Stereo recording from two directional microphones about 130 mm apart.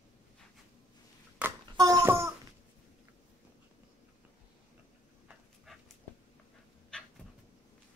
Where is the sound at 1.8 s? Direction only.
30° right (ahead or behind).